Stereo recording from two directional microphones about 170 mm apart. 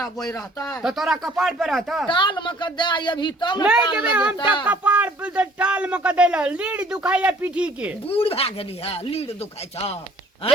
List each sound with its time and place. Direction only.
0.6 s speech: centre (ahead or behind)
2.0 s speech: 30° left (ahead or behind)
3.9 s speech: 5° right (ahead or behind)
8.0 s speech: 35° left (ahead or behind)